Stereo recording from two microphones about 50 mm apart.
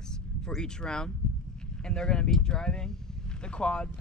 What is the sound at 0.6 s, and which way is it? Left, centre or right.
Speech, centre.